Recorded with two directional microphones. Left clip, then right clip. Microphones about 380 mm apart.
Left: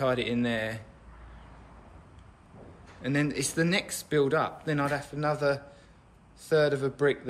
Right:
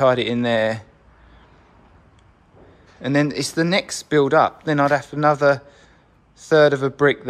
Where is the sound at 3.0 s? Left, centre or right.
Centre.